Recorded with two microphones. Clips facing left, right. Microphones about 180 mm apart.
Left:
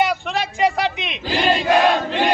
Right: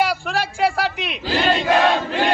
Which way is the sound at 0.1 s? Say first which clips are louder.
Even; 10° right (ahead or behind).